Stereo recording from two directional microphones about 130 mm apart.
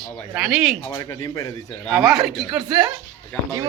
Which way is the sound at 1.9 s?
Centre (ahead or behind).